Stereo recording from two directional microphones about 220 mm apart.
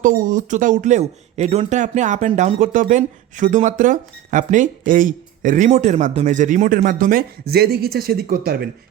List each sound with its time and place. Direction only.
0.0 s speech: 35° right (ahead or behind)